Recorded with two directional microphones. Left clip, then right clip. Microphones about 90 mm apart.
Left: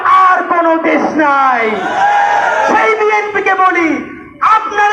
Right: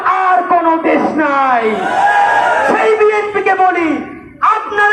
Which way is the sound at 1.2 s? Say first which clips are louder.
Left 5 dB; 20° right (ahead or behind).